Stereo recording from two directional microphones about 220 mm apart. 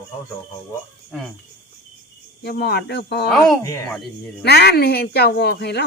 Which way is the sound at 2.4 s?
45° left (ahead or behind).